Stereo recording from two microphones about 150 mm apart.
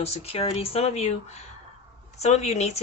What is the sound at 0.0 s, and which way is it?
Speech, 45° left (ahead or behind).